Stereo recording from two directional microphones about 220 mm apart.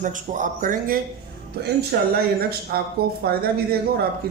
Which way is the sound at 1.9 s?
45° right (ahead or behind).